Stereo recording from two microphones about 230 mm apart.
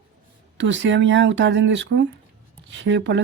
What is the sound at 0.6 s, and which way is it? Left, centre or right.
Speech, right.